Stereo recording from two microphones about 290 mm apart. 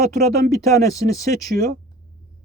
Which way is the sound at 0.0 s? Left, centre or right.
Right.